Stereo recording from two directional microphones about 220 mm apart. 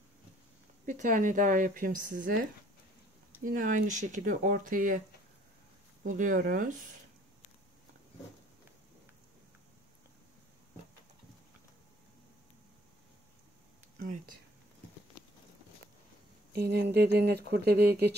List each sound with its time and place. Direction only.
0.8 s speech: 35° right (ahead or behind)
3.4 s speech: 35° right (ahead or behind)
6.0 s speech: 35° right (ahead or behind)
13.9 s a sound: 35° right (ahead or behind)
16.5 s speech: 50° right (ahead or behind)